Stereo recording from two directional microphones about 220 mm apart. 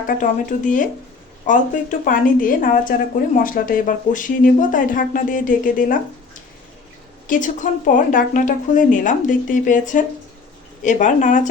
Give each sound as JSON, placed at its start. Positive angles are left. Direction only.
{"t": 0.1, "sound": "speech", "side_deg": 35}
{"t": 7.3, "sound": "speech", "side_deg": 35}